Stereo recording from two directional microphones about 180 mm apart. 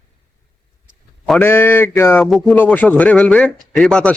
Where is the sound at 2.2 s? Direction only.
Centre (ahead or behind).